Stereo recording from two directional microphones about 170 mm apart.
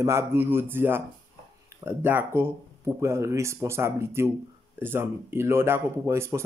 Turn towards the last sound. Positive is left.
turn(degrees=-15)  # may be behind; listen again after turning